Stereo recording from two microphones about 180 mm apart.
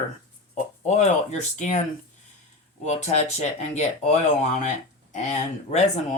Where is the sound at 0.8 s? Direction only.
40° left (ahead or behind).